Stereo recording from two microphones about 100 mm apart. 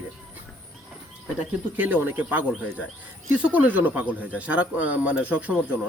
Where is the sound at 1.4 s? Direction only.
15° right (ahead or behind).